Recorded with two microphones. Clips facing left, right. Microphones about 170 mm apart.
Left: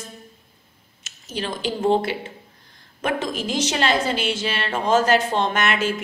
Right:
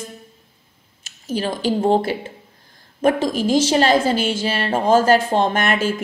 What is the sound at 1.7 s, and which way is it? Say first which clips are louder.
Speech: right 1 dB; 40° right (ahead or behind).